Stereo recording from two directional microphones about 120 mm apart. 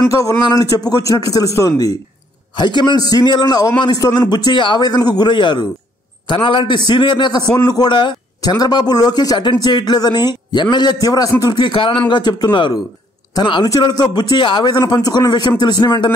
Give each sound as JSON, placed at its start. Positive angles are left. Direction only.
{"t": 0.1, "sound": "a man's voice", "side_deg": 30}